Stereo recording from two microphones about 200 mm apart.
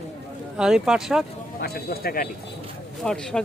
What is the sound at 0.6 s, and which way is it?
Speech, 5° right (ahead or behind).